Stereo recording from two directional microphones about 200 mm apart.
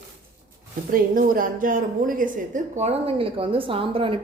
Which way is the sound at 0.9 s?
45° right (ahead or behind).